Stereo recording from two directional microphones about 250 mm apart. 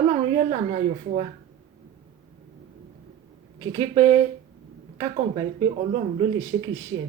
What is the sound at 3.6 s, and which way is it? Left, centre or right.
Speech, centre.